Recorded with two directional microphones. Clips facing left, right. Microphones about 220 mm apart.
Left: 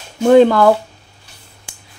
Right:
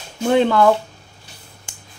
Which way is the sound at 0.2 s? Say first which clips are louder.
Left 6 dB; 40° left (ahead or behind).